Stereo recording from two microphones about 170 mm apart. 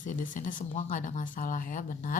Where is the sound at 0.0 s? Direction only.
50° left (ahead or behind).